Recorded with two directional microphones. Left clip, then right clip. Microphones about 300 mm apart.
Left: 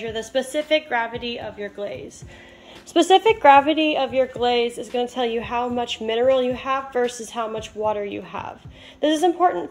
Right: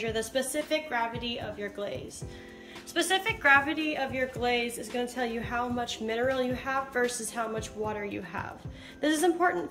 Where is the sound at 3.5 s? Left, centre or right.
Centre.